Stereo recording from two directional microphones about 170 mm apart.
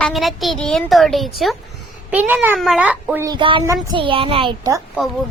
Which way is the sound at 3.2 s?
30° right (ahead or behind).